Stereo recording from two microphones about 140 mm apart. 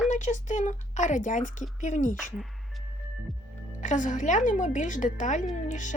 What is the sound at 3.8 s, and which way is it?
A woman's voice, 60° left (ahead or behind).